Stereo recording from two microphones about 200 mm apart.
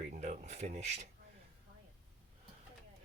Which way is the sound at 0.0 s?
35° right (ahead or behind).